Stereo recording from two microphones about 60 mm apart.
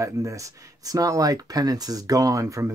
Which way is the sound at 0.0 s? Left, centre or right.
Right.